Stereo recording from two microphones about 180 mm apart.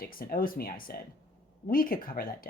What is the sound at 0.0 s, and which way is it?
Speech, 55° left (ahead or behind).